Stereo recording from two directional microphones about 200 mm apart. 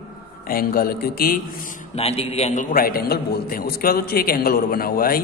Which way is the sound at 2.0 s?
30° left (ahead or behind).